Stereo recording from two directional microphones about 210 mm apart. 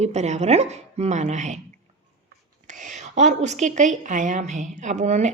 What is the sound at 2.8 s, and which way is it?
A woman's voice, 35° right (ahead or behind).